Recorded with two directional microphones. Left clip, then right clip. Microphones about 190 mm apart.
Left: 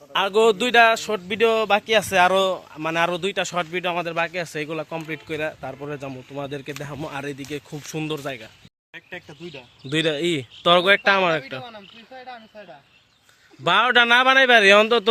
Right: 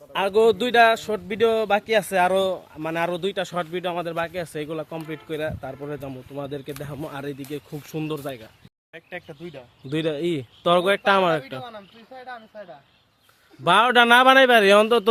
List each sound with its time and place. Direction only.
0.1 s a man's voice: centre (ahead or behind)
8.9 s a sound: 55° right (ahead or behind)
9.5 s speech: 15° right (ahead or behind)
9.9 s speech: centre (ahead or behind)
13.7 s speech: 15° right (ahead or behind)